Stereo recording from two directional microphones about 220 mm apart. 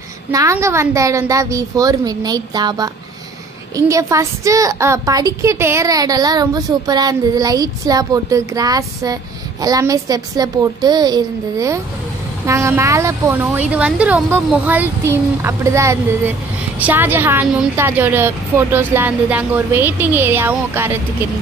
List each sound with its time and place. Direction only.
0.3 s speech: 15° right (ahead or behind)